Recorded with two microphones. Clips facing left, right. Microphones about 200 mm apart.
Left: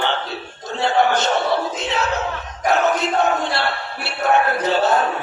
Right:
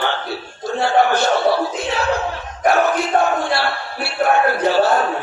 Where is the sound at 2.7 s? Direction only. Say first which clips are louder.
Right 2 dB; 20° left (ahead or behind).